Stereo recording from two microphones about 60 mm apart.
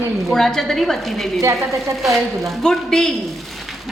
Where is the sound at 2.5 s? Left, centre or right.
Centre.